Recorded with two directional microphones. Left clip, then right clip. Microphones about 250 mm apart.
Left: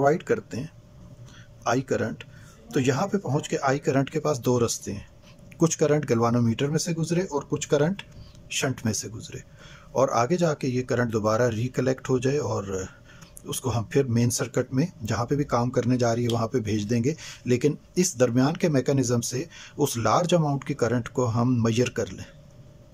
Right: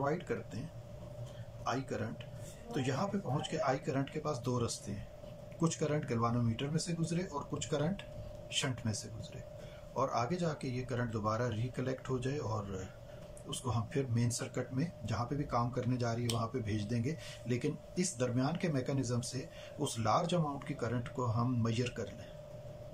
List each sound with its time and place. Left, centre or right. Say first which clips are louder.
0.0 s speech: left 14 dB; left
1.6 s speech: left 13 dB; left
13.5 s speech: left 11 dB; left